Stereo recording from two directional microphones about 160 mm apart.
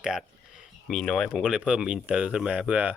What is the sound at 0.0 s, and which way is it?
Speech, 5° right (ahead or behind).